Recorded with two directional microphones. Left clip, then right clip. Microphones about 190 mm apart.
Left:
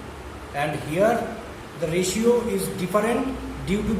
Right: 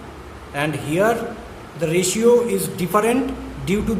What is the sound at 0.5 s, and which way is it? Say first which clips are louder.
Speech: right 4 dB; 55° right (ahead or behind).